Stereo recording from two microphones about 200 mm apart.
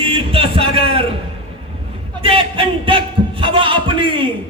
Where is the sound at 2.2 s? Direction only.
25° right (ahead or behind).